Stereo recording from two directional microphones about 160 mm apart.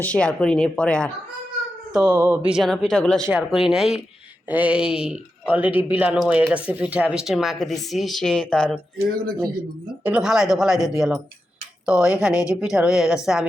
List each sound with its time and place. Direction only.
0.0 s speech: 5° left (ahead or behind)
1.9 s speech: 5° right (ahead or behind)
3.2 s speech: 5° right (ahead or behind)
9.0 s speech: 70° right (ahead or behind)
10.0 s speech: 5° right (ahead or behind)